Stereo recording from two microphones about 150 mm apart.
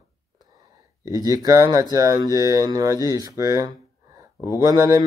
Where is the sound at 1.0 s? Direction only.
20° right (ahead or behind).